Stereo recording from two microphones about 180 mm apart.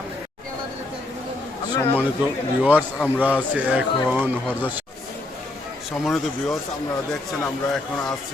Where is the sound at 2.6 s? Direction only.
10° right (ahead or behind).